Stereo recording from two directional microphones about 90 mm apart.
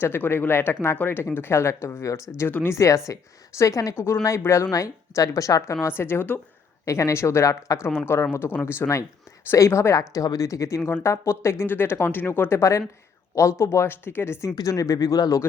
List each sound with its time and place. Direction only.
0.0 s speech: 25° left (ahead or behind)
6.0 s speech: 25° left (ahead or behind)
6.8 s speech: 35° left (ahead or behind)
14.5 s speech: 40° left (ahead or behind)